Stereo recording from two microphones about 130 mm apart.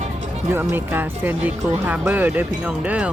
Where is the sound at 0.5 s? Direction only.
15° right (ahead or behind).